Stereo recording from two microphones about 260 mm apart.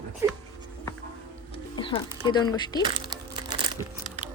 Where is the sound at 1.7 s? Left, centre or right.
Centre.